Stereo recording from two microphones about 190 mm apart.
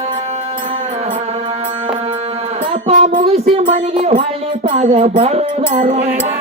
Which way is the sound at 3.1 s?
35° right (ahead or behind).